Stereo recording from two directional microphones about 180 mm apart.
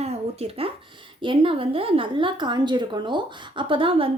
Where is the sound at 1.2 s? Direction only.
30° right (ahead or behind).